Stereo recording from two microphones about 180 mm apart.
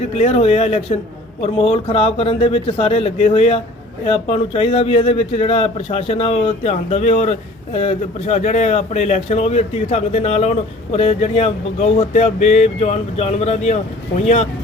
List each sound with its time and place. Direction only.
0.2 s a man's voice: 35° left (ahead or behind)